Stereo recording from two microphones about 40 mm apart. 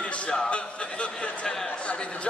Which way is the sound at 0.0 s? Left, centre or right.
Left.